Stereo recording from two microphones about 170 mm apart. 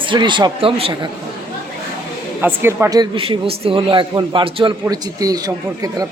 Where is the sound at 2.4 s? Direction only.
15° right (ahead or behind).